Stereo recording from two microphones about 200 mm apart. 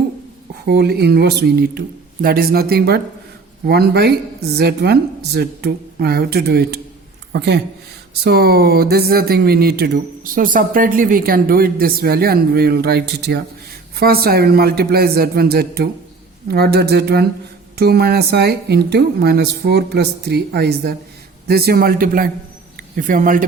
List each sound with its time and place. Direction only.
0.6 s a woman's voice: 55° right (ahead or behind)